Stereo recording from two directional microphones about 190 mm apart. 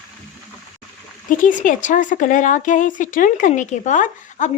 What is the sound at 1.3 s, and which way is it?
A woman's voice, 45° left (ahead or behind).